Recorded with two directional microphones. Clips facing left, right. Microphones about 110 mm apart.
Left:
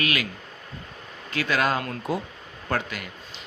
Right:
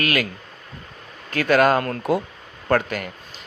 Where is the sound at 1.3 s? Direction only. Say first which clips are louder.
Right 7 dB; 50° right (ahead or behind).